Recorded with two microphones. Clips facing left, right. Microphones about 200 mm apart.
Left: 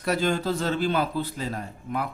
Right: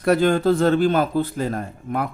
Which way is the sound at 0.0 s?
55° right (ahead or behind).